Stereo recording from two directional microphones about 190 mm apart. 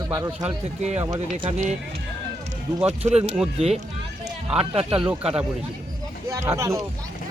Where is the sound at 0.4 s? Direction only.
35° right (ahead or behind).